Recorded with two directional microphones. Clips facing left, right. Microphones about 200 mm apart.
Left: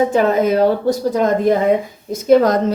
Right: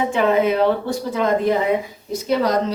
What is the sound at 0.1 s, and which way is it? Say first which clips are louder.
Speech: left 3 dB; 40° left (ahead or behind).